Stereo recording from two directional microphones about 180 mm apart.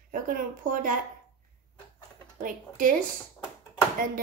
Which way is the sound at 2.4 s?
50° right (ahead or behind).